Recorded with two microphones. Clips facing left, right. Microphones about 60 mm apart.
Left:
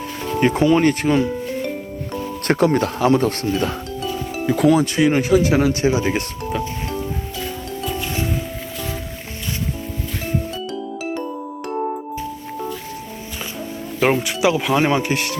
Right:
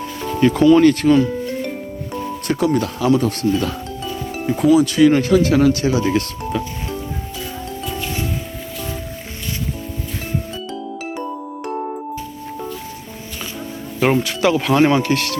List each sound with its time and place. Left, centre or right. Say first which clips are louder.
0.3 s speech: right 4 dB; left
2.5 s speech: left 2 dB; left
3.4 s speech: right 2 dB; left
4.0 s music: left 1 dB; centre
4.9 s speech: right 3 dB; centre
6.5 s music: even; centre
10.7 s music: left 1 dB; centre
11.7 s music: left 2 dB; centre
14.0 s speech: right 1 dB; centre